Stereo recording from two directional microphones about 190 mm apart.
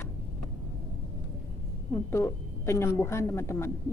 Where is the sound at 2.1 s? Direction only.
15° left (ahead or behind).